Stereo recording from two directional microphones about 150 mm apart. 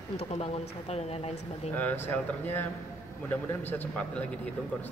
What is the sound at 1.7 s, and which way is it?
A man's voice, 15° left (ahead or behind).